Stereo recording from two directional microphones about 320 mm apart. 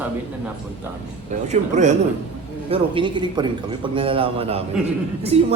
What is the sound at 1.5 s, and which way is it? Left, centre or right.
Speech, right.